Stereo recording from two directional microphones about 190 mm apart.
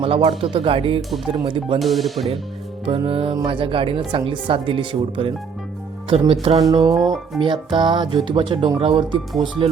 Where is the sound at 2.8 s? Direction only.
30° right (ahead or behind).